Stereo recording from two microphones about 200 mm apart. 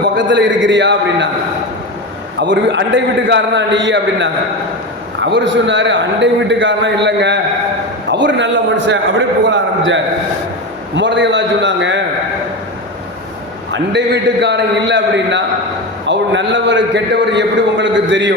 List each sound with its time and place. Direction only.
0.0 s a man's voice: 65° right (ahead or behind)
2.4 s a man's voice: 65° right (ahead or behind)
13.9 s a man's voice: 60° right (ahead or behind)